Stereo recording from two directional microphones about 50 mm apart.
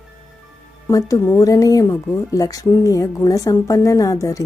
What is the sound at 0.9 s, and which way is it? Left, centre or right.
Speech, left.